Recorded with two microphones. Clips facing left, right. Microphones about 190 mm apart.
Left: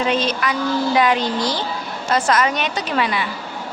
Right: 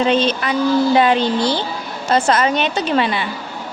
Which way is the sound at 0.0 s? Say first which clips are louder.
Right 4 dB; 30° right (ahead or behind).